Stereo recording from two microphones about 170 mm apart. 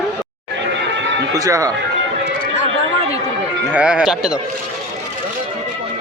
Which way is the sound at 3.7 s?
5° right (ahead or behind).